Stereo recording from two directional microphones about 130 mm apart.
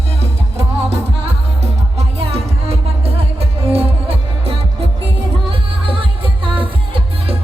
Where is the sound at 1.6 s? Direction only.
50° right (ahead or behind).